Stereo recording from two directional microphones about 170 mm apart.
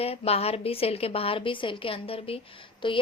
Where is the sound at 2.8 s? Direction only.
30° left (ahead or behind).